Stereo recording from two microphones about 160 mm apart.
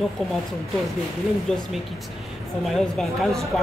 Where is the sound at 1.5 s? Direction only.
5° left (ahead or behind).